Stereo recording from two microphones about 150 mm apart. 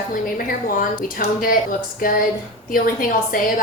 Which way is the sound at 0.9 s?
65° left (ahead or behind).